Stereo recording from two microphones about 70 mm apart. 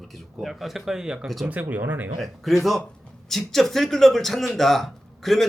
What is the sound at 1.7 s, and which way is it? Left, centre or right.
Speech, right.